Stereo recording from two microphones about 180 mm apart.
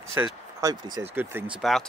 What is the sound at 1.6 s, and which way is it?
Speech, centre (ahead or behind).